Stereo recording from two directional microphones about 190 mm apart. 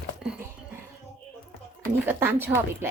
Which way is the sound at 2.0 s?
10° right (ahead or behind).